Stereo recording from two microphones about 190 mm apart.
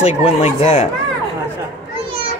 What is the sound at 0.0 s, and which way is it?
Speech, 35° left (ahead or behind).